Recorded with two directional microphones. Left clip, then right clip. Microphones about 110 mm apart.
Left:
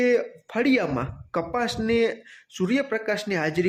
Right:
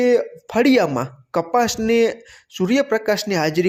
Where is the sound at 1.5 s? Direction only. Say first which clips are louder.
Right 8 dB; 45° right (ahead or behind).